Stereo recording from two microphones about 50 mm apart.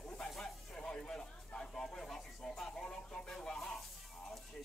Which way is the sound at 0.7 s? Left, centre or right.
Centre.